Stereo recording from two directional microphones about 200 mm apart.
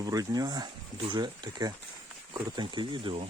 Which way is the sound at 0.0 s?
20° right (ahead or behind).